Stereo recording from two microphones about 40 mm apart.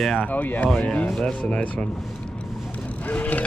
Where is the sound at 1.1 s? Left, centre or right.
Left.